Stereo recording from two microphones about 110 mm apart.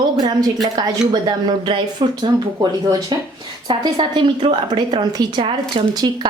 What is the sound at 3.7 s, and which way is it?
Speech, 45° right (ahead or behind).